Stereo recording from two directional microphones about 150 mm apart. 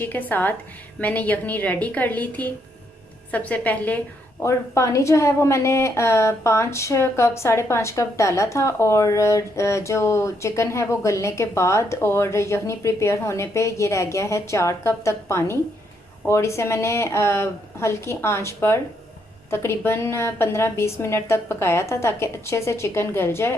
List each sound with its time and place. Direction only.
0.0 s a woman's voice: 10° left (ahead or behind)